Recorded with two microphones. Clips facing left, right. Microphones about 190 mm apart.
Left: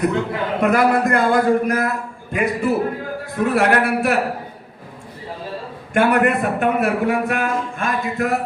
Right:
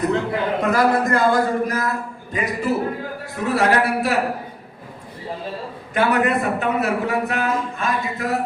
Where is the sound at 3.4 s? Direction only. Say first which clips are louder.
Left 2 dB; 55° left (ahead or behind).